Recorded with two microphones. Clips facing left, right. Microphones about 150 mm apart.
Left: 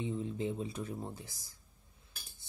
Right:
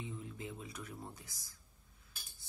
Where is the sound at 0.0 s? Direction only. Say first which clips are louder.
Left 10 dB; 25° left (ahead or behind).